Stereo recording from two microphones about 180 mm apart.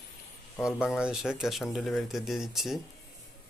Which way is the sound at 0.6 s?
5° right (ahead or behind).